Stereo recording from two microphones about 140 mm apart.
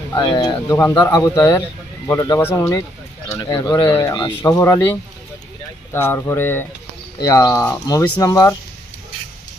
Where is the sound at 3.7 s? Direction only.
15° left (ahead or behind).